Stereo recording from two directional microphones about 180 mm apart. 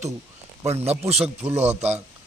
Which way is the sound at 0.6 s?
35° right (ahead or behind).